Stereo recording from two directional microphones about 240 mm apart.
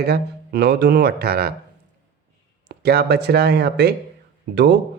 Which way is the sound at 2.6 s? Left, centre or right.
Right.